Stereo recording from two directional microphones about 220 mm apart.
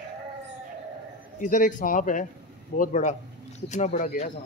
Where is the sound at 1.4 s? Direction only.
35° left (ahead or behind).